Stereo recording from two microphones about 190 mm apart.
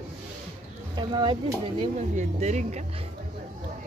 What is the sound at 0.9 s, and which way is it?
Speech, 25° right (ahead or behind).